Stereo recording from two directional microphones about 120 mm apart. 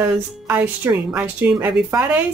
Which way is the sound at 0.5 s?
15° right (ahead or behind).